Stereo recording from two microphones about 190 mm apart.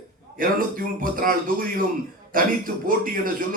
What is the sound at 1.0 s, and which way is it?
A man's voice, 45° right (ahead or behind).